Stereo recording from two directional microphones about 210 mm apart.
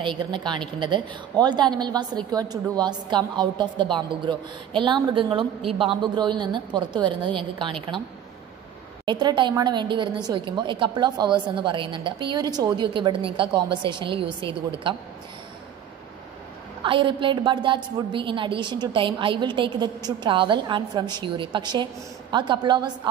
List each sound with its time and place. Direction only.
0.0 s a woman's voice: 25° right (ahead or behind)
9.0 s a woman's voice: 20° right (ahead or behind)
16.8 s a woman's voice: 25° right (ahead or behind)